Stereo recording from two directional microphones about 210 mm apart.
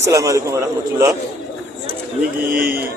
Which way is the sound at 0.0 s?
15° right (ahead or behind).